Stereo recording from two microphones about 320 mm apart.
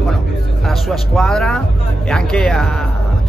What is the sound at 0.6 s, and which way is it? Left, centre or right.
A man's voice, centre.